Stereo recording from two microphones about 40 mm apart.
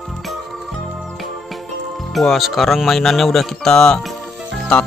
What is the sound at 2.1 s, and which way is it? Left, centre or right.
Speech, centre.